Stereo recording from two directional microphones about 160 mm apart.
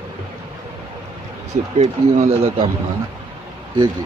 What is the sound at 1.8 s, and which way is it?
Speech, 40° right (ahead or behind).